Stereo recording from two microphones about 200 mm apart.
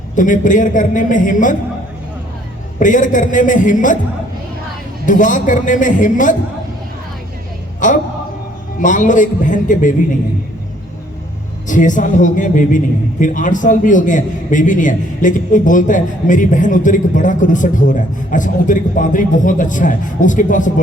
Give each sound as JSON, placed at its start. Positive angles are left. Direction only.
{"t": 0.2, "sound": "a man's voice", "side_deg": 40}
{"t": 2.7, "sound": "a man's voice", "side_deg": 40}
{"t": 5.0, "sound": "a man's voice", "side_deg": 40}
{"t": 7.8, "sound": "a man's voice", "side_deg": 40}
{"t": 11.7, "sound": "a man's voice", "side_deg": 40}